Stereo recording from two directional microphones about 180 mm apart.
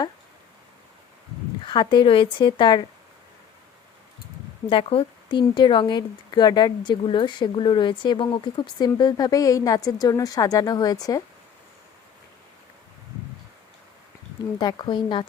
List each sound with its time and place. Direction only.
1.6 s speech: 25° left (ahead or behind)
4.7 s speech: 30° left (ahead or behind)
14.6 s speech: 25° left (ahead or behind)